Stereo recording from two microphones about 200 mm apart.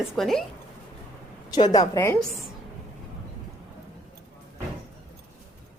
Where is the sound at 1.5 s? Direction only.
20° left (ahead or behind).